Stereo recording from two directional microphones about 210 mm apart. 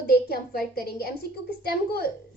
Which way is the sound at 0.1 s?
45° left (ahead or behind).